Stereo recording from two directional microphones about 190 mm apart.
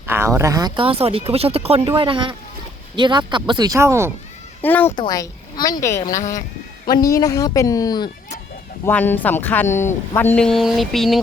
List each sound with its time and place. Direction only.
0.0 s speech: 15° right (ahead or behind)
4.6 s a man's voice: 10° left (ahead or behind)
8.8 s speech: 10° left (ahead or behind)